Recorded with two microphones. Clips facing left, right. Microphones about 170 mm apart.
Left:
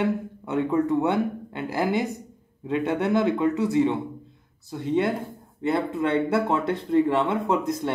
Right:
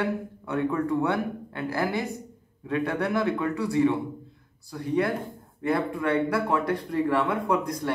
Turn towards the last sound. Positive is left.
turn(degrees=25)  # may be behind; listen again after turning